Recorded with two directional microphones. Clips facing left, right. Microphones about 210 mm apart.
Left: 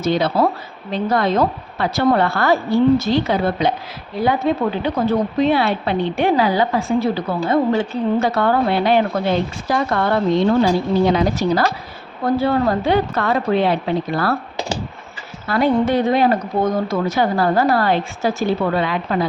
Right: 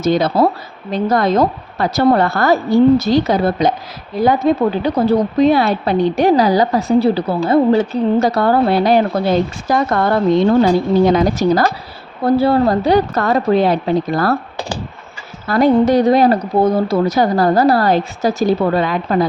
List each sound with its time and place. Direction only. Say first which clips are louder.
0.0 s a woman's voice: right 3 dB; 45° right (ahead or behind)
15.4 s a woman's voice: right 5 dB; 40° right (ahead or behind)